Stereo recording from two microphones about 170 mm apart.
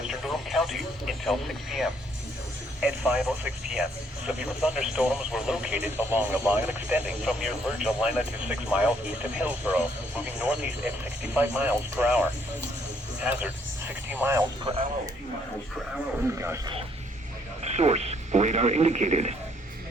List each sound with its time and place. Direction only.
0.0 s speech: centre (ahead or behind)
16.2 s speech: 15° right (ahead or behind)
17.6 s speech: 40° right (ahead or behind)